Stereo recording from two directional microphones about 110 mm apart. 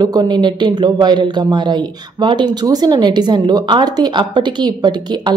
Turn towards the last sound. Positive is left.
turn(degrees=-40)  # may be behind; listen again after turning